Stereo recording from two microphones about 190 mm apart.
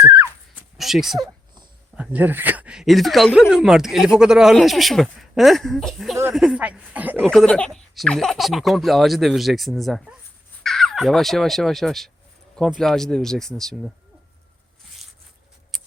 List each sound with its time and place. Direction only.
0.8 s speech: centre (ahead or behind)
7.2 s speech: 5° left (ahead or behind)